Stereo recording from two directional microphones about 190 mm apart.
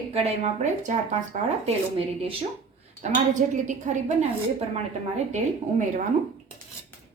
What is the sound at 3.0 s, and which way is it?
A woman's voice, 40° right (ahead or behind).